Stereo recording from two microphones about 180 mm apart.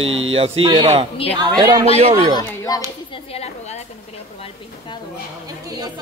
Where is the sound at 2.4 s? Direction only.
20° left (ahead or behind).